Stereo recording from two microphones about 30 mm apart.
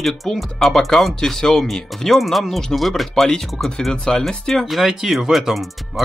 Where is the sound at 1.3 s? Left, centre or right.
Centre.